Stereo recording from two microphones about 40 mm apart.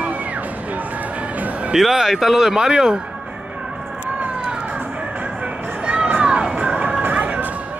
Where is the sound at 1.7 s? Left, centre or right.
Centre.